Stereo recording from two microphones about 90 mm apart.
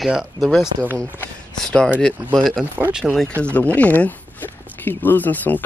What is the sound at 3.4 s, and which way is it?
Speech, 15° left (ahead or behind).